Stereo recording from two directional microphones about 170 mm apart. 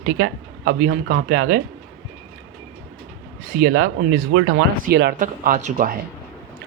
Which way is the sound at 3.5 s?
55° right (ahead or behind).